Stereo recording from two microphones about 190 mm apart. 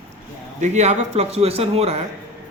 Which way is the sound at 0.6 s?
35° right (ahead or behind).